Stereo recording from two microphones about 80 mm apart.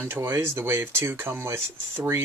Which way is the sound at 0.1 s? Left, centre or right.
Right.